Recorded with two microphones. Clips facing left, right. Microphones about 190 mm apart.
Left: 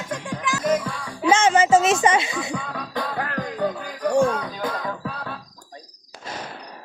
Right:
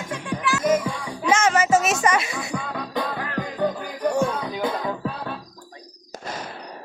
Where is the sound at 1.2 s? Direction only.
30° left (ahead or behind).